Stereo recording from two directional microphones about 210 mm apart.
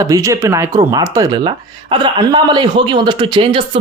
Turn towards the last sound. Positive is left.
turn(degrees=-20)  # may be behind; listen again after turning